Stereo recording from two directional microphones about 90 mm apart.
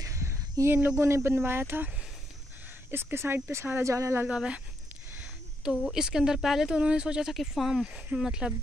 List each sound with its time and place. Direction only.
0.0 s a sound: 35° right (ahead or behind)
0.9 s speech: 30° right (ahead or behind)
2.9 s speech: 25° right (ahead or behind)
4.3 s speech: 10° right (ahead or behind)
5.6 s speech: 5° right (ahead or behind)